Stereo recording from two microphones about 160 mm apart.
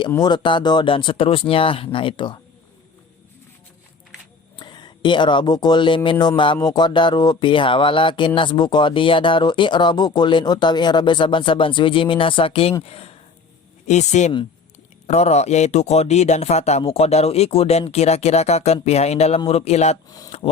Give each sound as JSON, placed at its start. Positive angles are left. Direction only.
{"t": 0.2, "sound": "speech", "side_deg": 25}
{"t": 4.5, "sound": "speech", "side_deg": 30}